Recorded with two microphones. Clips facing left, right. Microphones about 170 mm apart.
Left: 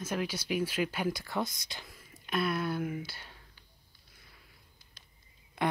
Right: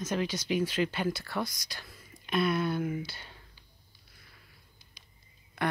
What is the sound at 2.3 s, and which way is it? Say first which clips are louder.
Speech: right 3 dB; 5° left (ahead or behind).